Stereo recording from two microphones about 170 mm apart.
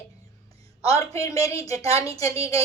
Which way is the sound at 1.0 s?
20° left (ahead or behind).